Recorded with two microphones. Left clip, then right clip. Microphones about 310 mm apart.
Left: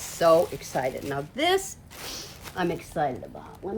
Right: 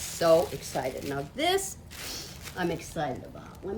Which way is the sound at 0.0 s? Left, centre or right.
Left.